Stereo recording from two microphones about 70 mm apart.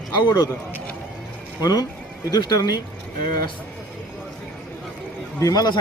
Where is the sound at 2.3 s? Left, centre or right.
Left.